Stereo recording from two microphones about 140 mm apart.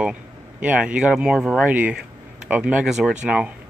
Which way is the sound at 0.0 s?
10° right (ahead or behind).